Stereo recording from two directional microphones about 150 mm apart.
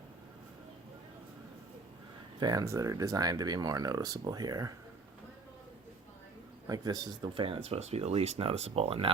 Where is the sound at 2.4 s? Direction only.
25° right (ahead or behind).